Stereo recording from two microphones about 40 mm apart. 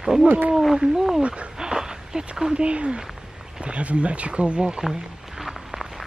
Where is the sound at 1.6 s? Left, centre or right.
Centre.